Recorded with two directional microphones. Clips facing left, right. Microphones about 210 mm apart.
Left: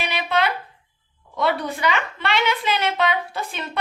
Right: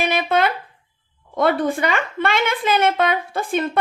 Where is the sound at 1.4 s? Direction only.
50° right (ahead or behind).